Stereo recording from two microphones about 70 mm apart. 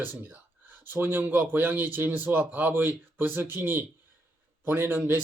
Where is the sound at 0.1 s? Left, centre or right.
Right.